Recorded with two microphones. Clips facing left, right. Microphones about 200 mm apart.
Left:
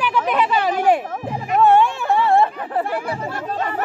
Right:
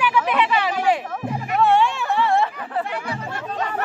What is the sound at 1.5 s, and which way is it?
Music, 45° left (ahead or behind).